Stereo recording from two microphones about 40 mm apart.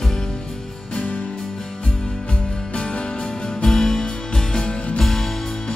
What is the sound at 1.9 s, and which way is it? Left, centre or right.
Music, left.